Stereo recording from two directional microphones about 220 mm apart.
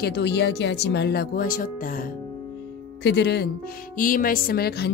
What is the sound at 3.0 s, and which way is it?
A woman's voice, 50° left (ahead or behind).